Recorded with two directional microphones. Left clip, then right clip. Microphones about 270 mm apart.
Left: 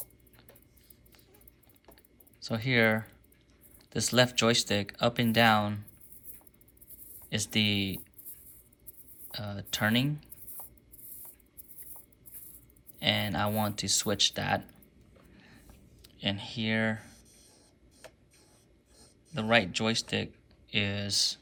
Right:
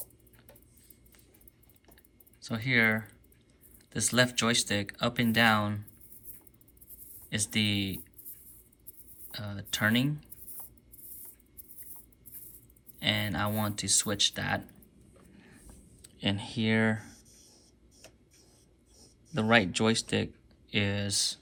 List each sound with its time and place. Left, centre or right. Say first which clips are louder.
2.4 s speech: even; centre
7.3 s speech: left 1 dB; centre
9.3 s speech: even; centre
13.0 s speech: left 1 dB; centre
15.4 s a sound: right 1 dB; centre
19.3 s speech: right 1 dB; centre